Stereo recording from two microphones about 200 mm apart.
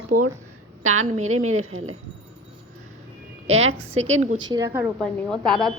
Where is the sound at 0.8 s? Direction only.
90° right.